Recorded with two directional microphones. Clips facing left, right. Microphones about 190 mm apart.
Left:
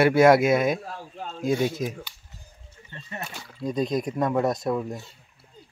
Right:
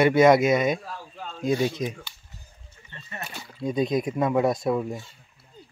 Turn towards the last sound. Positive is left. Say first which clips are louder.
# right 1 dB
turn(degrees=-5)  # may be behind; listen again after turning